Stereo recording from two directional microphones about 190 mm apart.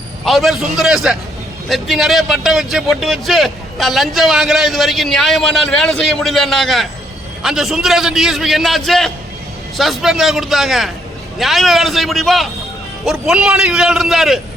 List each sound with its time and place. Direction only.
0.3 s a man's voice: centre (ahead or behind)